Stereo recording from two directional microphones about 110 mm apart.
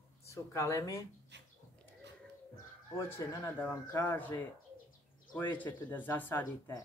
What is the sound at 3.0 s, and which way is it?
Speech, 20° left (ahead or behind).